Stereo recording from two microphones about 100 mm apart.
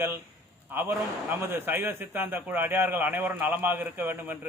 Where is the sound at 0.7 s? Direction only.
25° right (ahead or behind).